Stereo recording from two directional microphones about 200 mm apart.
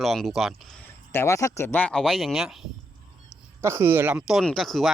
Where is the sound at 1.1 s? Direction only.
15° left (ahead or behind); by 2.6 s centre (ahead or behind).